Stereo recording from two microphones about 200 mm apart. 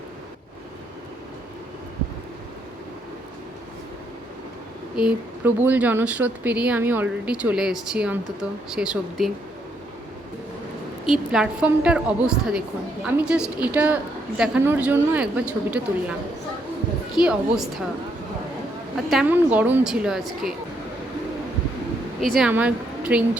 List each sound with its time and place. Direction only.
4.9 s a woman's voice: 5° right (ahead or behind)
11.0 s a woman's voice: centre (ahead or behind)
17.2 s a woman's voice: 5° right (ahead or behind)
18.9 s a woman's voice: 5° right (ahead or behind)
22.2 s a woman's voice: centre (ahead or behind)